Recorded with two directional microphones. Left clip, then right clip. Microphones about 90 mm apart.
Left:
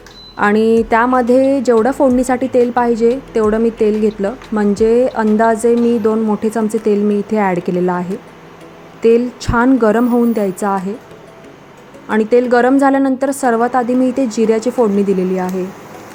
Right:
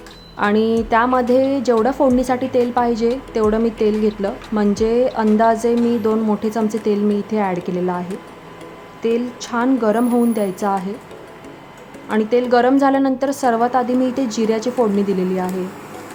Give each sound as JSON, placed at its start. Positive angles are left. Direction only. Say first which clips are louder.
{"t": 0.3, "sound": "a woman's voice", "louder": "left 5 dB", "side_deg": 45}
{"t": 10.0, "sound": "speech", "louder": "left 3 dB", "side_deg": 40}
{"t": 12.0, "sound": "speech", "louder": "left 5 dB", "side_deg": 50}